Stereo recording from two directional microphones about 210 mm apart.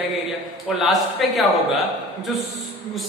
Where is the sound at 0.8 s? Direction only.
Centre (ahead or behind).